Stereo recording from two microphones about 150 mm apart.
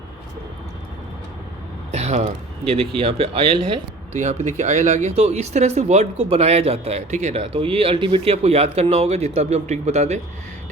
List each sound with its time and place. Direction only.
1.9 s speech: 45° right (ahead or behind)
4.1 s speech: 55° right (ahead or behind)
7.4 s speech: 40° right (ahead or behind)